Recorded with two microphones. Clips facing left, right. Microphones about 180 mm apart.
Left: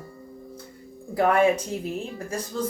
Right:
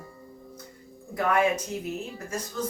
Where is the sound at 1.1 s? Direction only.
30° left (ahead or behind).